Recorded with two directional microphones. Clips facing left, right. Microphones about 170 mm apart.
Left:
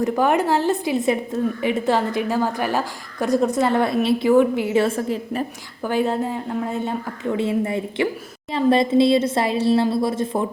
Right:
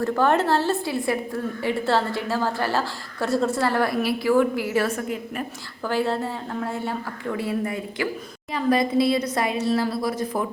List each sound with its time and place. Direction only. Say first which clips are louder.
0.0 s a woman's voice: left 2 dB; 15° left (ahead or behind); by 5.5 s 30° left (ahead or behind)
5.8 s a woman's voice: left 3 dB; 15° left (ahead or behind)